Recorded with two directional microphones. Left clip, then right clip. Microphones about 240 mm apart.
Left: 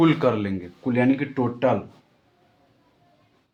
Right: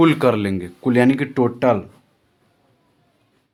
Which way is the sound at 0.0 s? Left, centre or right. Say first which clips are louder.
Right 4 dB; right.